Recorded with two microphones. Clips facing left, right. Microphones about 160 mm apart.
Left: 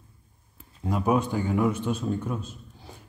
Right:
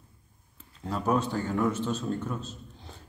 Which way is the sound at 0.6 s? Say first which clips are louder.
Left 4 dB; 10° left (ahead or behind).